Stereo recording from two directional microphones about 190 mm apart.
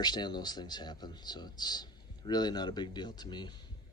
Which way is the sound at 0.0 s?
20° left (ahead or behind).